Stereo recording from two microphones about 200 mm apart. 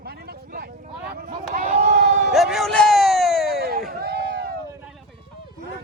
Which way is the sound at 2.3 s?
Centre (ahead or behind).